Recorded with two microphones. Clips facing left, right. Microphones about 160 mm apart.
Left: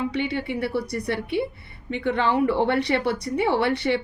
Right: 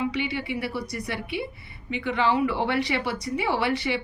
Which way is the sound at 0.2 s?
55° left (ahead or behind).